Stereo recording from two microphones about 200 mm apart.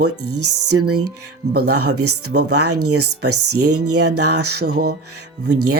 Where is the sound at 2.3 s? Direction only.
40° right (ahead or behind).